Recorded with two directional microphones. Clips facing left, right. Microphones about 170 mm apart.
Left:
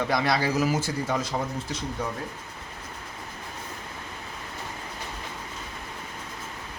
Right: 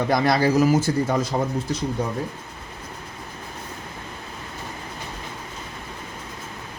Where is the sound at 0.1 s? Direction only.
45° right (ahead or behind).